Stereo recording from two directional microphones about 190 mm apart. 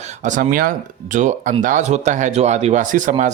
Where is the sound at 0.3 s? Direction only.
45° right (ahead or behind).